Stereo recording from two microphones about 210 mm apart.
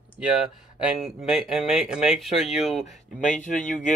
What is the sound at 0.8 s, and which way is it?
Speech, 5° right (ahead or behind).